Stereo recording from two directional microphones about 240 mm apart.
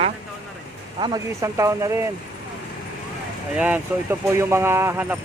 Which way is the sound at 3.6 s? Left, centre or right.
Centre.